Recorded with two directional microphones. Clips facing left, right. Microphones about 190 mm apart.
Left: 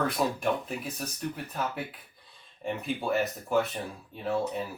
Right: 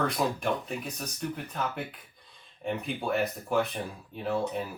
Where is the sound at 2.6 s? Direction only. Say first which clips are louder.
Left 1 dB; centre (ahead or behind).